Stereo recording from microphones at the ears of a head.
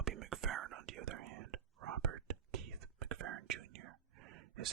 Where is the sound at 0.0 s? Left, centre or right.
Right.